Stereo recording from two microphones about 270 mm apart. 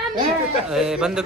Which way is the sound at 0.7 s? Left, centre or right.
Centre.